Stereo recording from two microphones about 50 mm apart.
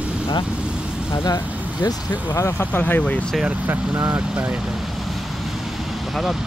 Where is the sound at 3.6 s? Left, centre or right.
Right.